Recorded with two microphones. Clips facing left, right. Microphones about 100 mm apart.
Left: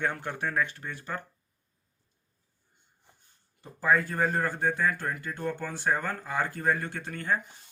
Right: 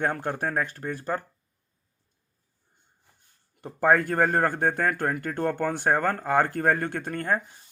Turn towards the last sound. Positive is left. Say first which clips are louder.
# right 4 dB
turn(degrees=-45)  # may be behind; listen again after turning